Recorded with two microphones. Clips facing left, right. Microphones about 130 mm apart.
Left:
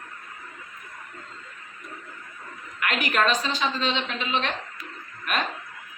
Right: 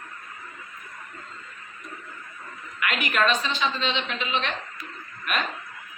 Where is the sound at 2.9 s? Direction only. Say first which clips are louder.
Even; 35° left (ahead or behind).